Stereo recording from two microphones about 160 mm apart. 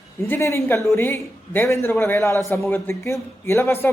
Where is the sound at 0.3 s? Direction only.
15° left (ahead or behind).